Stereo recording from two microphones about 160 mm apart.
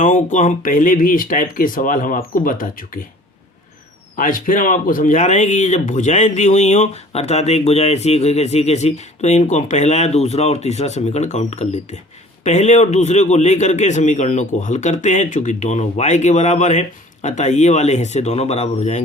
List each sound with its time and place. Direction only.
0.0 s speech: 50° left (ahead or behind)
4.2 s speech: 60° left (ahead or behind); by 19.0 s 40° left (ahead or behind)